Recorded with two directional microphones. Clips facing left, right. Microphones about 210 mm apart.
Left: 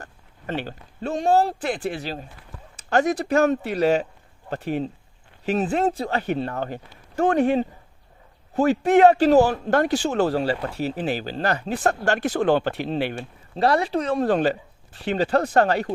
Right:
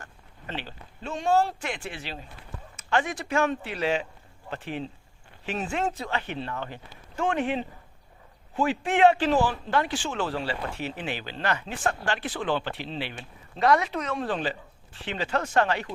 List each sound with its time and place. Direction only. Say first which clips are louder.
0.0 s speech: left 6 dB; 45° left (ahead or behind)
13.6 s speech: left 3 dB; 30° left (ahead or behind)